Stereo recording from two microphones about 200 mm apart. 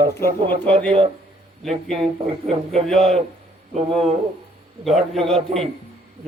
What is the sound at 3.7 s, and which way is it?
Speech, 30° right (ahead or behind).